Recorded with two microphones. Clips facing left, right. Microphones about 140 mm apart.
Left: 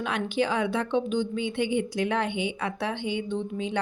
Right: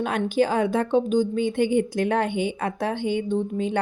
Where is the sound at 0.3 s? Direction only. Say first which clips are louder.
Right 5 dB; 45° right (ahead or behind).